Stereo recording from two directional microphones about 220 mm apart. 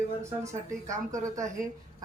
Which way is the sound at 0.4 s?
15° right (ahead or behind).